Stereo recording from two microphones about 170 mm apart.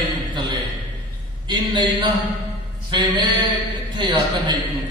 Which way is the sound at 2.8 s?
25° right (ahead or behind).